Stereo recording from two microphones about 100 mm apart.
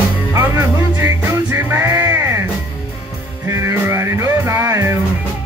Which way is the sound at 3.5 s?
30° right (ahead or behind).